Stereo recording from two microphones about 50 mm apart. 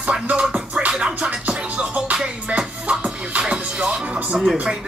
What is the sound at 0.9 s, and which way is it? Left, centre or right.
Music, centre.